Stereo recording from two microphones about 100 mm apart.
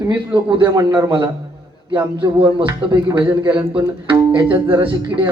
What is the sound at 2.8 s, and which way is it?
Speech, 50° right (ahead or behind).